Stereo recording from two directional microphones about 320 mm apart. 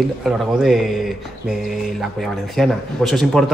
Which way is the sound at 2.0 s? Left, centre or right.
Centre.